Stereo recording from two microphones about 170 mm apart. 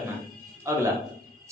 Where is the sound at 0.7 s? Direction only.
15° right (ahead or behind).